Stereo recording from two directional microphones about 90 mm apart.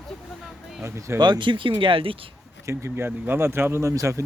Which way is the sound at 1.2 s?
65° right (ahead or behind).